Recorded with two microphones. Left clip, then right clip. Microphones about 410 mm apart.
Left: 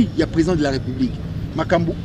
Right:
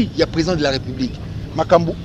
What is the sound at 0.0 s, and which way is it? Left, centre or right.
Speech, centre.